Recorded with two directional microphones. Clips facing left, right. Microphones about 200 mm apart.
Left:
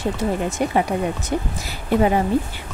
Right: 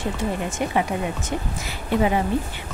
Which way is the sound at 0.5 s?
35° left (ahead or behind).